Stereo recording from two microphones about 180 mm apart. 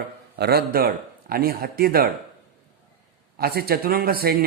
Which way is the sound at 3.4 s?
60° right (ahead or behind).